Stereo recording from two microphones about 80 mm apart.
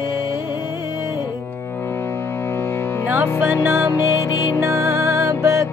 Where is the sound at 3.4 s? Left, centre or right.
Right.